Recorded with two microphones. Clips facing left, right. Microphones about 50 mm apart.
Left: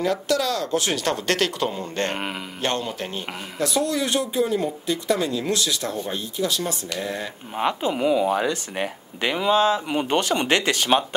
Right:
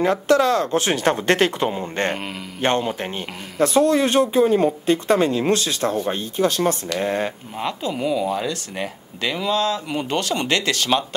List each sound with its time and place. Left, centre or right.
0.0 s speech: right
7.5 s speech: left